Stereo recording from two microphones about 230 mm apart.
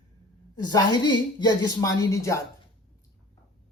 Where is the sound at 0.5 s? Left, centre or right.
Centre.